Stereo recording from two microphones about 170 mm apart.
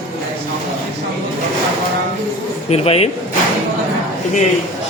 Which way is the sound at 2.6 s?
35° left (ahead or behind).